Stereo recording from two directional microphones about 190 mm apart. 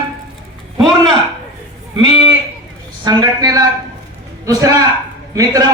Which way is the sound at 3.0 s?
20° right (ahead or behind).